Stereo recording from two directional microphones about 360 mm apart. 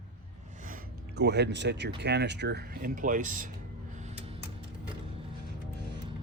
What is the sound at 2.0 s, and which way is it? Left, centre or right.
Speech, right.